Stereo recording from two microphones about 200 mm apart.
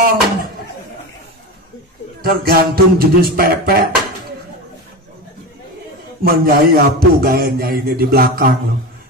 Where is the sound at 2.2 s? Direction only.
50° right (ahead or behind).